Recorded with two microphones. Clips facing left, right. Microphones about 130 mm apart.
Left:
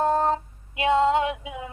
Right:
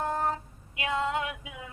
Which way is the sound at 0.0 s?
25° left (ahead or behind).